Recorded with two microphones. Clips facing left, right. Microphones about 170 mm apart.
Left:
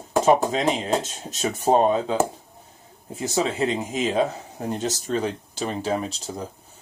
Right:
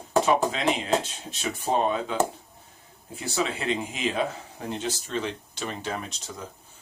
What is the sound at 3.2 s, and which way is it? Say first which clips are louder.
Speech: left 6 dB; 35° left (ahead or behind).